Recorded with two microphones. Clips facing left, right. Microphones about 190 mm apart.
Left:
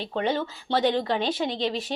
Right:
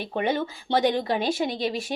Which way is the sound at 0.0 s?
15° right (ahead or behind).